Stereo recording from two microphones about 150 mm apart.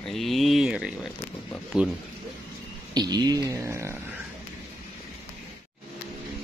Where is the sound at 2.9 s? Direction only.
30° right (ahead or behind).